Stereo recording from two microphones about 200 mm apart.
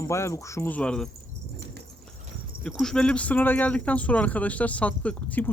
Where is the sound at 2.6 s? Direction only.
Centre (ahead or behind).